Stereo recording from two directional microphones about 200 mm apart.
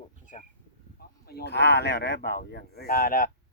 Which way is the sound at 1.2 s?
50° left (ahead or behind).